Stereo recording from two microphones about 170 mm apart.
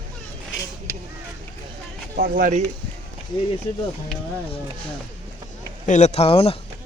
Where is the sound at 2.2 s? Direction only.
55° right (ahead or behind).